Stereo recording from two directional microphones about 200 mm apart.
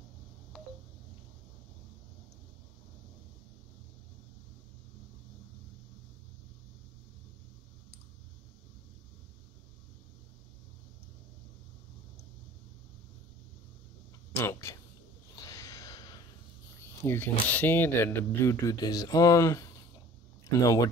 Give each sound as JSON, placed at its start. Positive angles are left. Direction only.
{"t": 14.3, "sound": "speech", "side_deg": 15}
{"t": 15.4, "sound": "a sound", "side_deg": 15}
{"t": 16.8, "sound": "speech", "side_deg": 10}